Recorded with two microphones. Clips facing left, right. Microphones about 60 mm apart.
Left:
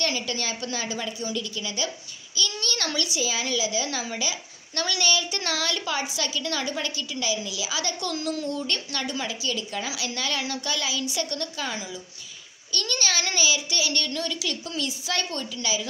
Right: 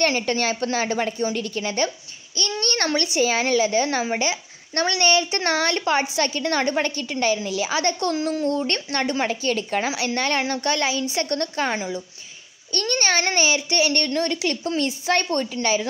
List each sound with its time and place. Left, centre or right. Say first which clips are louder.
0.0 s a child's voice: right 7 dB; right